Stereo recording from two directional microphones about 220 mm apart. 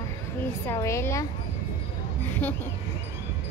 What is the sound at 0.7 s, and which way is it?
Speech, 15° left (ahead or behind).